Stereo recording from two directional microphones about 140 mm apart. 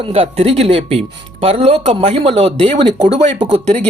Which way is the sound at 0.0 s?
45° right (ahead or behind).